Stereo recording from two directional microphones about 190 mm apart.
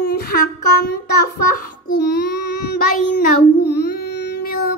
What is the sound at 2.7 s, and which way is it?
Child singing, 45° left (ahead or behind).